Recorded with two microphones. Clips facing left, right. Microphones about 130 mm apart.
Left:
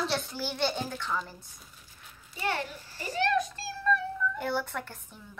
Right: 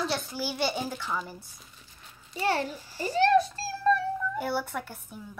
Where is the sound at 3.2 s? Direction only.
30° right (ahead or behind).